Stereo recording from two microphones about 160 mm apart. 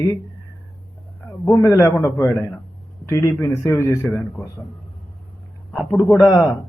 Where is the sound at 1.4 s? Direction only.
15° left (ahead or behind).